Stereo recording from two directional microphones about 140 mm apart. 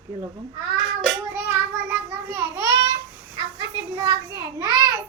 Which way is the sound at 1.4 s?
15° right (ahead or behind).